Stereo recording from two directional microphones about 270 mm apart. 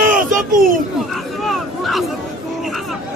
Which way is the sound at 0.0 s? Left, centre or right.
Right.